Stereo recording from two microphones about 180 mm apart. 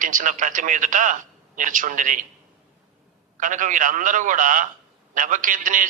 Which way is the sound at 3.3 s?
45° right (ahead or behind).